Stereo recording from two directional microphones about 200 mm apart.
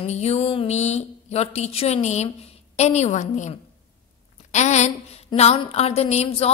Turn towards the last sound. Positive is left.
turn(degrees=30)  # may be behind; listen again after turning